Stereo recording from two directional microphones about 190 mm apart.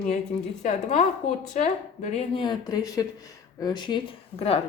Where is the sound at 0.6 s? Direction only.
40° left (ahead or behind).